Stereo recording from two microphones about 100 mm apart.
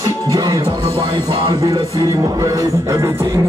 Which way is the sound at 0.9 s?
60° right (ahead or behind).